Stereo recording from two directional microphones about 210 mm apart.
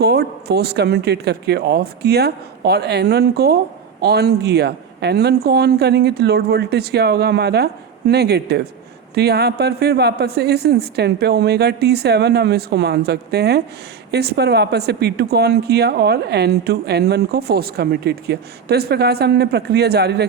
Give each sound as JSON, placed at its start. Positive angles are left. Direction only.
{"t": 0.0, "sound": "speech", "side_deg": -50}